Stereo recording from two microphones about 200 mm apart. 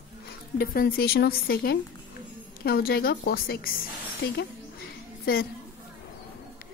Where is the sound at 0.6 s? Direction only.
50° left (ahead or behind).